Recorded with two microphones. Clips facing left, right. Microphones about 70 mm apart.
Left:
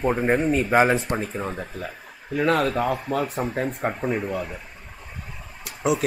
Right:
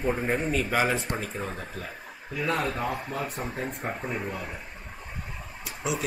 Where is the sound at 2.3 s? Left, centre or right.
Left.